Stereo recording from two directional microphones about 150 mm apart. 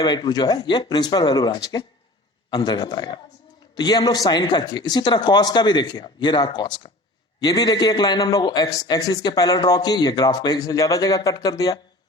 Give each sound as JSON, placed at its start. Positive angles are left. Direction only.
{"t": 0.0, "sound": "a man's voice", "side_deg": 30}